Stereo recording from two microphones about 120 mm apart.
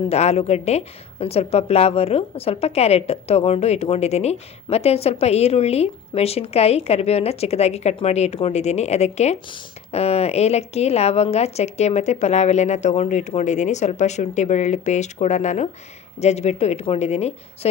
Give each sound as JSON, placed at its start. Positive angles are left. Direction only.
{"t": 0.1, "sound": "a woman's voice", "side_deg": 65}